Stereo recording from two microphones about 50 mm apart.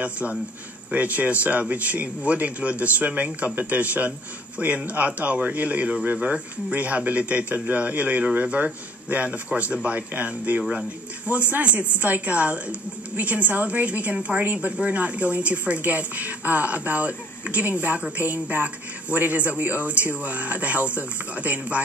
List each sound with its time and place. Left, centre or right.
0.0 s a woman's voice: right